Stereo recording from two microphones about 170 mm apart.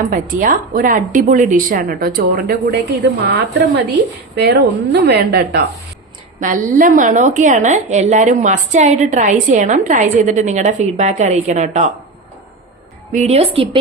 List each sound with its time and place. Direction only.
0.0 s a woman's voice: 50° right (ahead or behind); by 5.6 s 75° right (ahead or behind)
6.4 s a woman's voice: 50° right (ahead or behind)
13.1 s speech: 40° right (ahead or behind)